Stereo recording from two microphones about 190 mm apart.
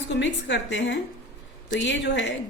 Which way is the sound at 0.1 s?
65° left (ahead or behind).